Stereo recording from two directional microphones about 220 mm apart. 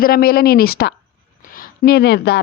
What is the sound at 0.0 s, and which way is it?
A woman's voice, 40° left (ahead or behind).